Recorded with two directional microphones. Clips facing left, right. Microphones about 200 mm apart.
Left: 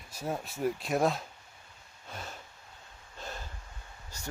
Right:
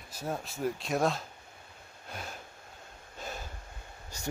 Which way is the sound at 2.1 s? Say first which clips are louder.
Right 1 dB; 10° right (ahead or behind).